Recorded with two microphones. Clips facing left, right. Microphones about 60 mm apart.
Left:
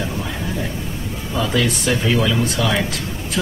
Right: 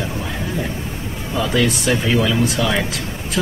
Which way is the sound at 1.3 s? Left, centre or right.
Centre.